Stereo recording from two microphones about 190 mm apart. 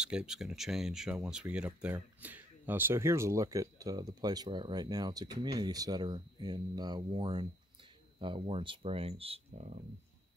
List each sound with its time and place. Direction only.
0.0 s speech: 5° right (ahead or behind); by 9.8 s 40° right (ahead or behind)